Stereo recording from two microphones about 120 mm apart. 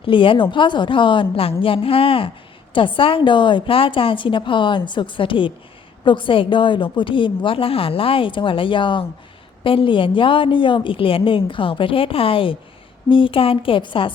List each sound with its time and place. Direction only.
0.0 s a woman's voice: 45° left (ahead or behind)